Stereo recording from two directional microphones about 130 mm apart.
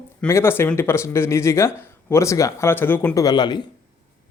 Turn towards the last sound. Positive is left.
turn(degrees=35)  # may be behind; listen again after turning